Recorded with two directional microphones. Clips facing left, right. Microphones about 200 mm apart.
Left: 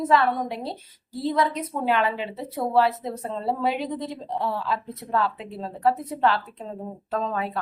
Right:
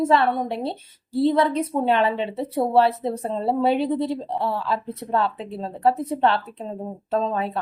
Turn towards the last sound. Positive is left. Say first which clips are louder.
# right 4 dB
turn(degrees=-25)  # may be behind; listen again after turning